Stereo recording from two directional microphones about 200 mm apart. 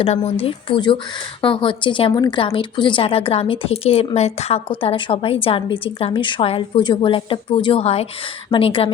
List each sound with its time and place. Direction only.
0.3 s a woman's voice: 30° left (ahead or behind)